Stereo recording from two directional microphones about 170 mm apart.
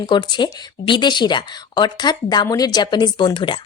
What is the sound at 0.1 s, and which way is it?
A woman's voice, 25° left (ahead or behind).